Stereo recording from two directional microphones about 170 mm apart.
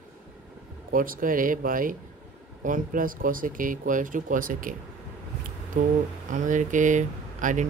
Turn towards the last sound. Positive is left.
turn(degrees=-45)  # may be behind; listen again after turning